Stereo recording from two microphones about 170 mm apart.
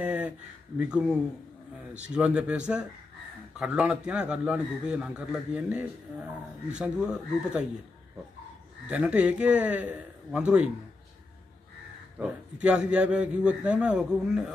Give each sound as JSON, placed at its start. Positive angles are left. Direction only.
{"t": 0.0, "sound": "a sound", "side_deg": -10}
{"t": 0.7, "sound": "a man's voice", "side_deg": -5}
{"t": 8.8, "sound": "a man's voice", "side_deg": -5}
{"t": 12.2, "sound": "a man's voice", "side_deg": -5}